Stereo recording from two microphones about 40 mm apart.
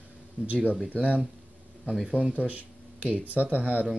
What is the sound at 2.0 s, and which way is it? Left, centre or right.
Speech, right.